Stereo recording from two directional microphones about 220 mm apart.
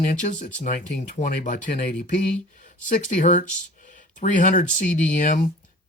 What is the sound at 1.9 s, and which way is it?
Speech, 5° left (ahead or behind).